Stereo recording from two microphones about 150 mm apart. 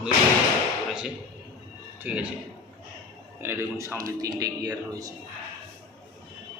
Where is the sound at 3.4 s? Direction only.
20° right (ahead or behind).